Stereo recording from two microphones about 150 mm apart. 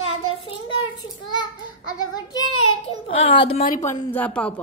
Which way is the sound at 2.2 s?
25° left (ahead or behind).